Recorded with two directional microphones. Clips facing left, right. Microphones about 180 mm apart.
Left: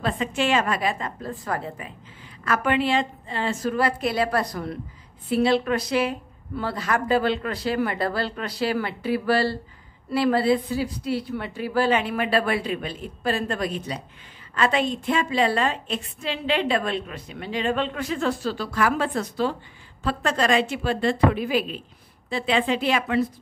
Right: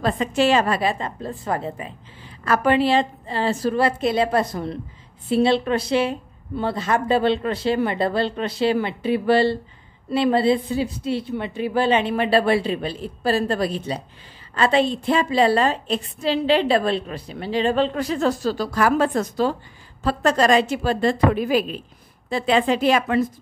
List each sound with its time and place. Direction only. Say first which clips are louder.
0.0 s a woman's voice: right 5 dB; 40° right (ahead or behind)